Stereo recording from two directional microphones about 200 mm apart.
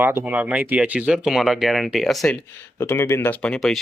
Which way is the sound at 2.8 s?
10° left (ahead or behind).